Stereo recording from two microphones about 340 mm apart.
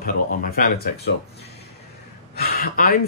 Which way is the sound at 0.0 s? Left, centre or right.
Left.